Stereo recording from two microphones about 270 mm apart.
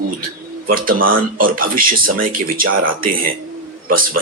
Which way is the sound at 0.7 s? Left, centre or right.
Right.